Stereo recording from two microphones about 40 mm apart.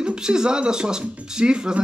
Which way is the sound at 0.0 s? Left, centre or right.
Right.